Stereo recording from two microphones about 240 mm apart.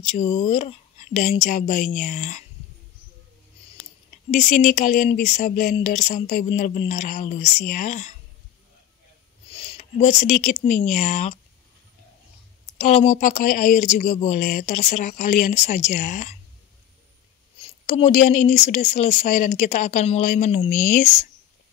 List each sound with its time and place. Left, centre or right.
0.1 s speech: left
4.4 s speech: left
9.5 s a sound: left
10.4 s speech: left
12.7 s speech: left
17.6 s speech: left